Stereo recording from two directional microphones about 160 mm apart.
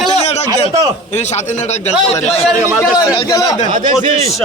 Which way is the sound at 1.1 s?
45° left (ahead or behind).